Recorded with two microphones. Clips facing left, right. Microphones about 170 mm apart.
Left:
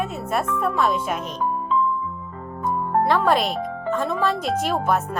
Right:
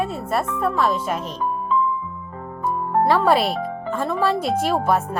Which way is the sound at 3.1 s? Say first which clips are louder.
Right 3 dB; 5° right (ahead or behind).